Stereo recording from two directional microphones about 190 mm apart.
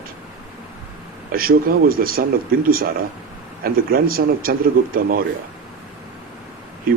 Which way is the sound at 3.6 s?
50° right (ahead or behind).